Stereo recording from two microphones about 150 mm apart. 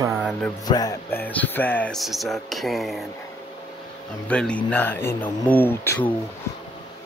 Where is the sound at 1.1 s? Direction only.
10° left (ahead or behind).